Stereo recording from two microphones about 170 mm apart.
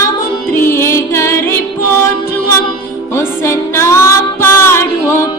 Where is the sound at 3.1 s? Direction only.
15° left (ahead or behind).